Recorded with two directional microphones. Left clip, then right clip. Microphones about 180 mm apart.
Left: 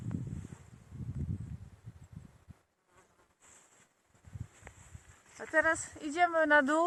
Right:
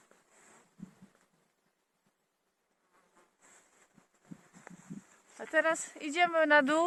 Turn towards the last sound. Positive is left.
turn(degrees=-20)  # may be behind; listen again after turning